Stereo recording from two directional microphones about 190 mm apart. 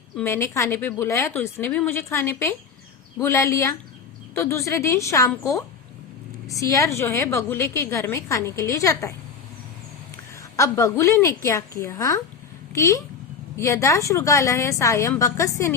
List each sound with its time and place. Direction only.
0.2 s a woman's voice: 15° left (ahead or behind)
10.6 s a woman's voice: 15° left (ahead or behind)